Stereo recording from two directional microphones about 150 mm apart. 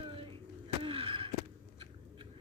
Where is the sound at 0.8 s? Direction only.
35° right (ahead or behind).